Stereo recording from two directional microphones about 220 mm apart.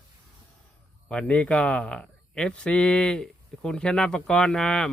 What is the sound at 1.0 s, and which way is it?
Speech, 5° left (ahead or behind).